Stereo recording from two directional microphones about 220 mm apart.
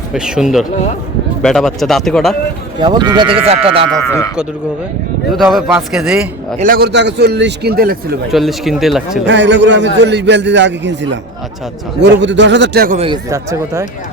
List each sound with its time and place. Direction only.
0.1 s speech: 5° right (ahead or behind)
2.8 s speech: 20° right (ahead or behind)
4.0 s speech: 15° left (ahead or behind)
5.4 s speech: centre (ahead or behind)
6.6 s a man's voice: 40° right (ahead or behind)
8.3 s speech: centre (ahead or behind)
9.2 s a man's voice: 55° right (ahead or behind)
13.3 s speech: 15° right (ahead or behind)